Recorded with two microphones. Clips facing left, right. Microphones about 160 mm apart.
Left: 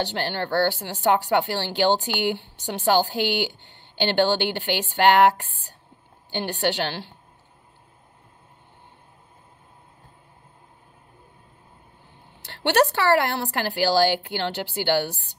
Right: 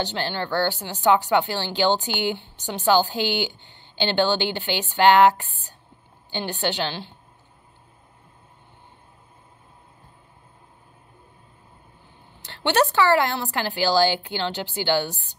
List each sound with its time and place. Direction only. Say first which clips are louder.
0.0 s speech: even; 60° left (ahead or behind)
6.6 s speech: left 2 dB; 65° left (ahead or behind)
12.4 s a sound: left 1 dB; 60° left (ahead or behind)
12.9 s speech: right 1 dB; 60° left (ahead or behind)